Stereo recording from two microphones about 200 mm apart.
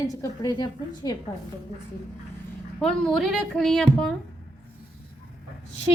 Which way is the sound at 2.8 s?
5° left (ahead or behind).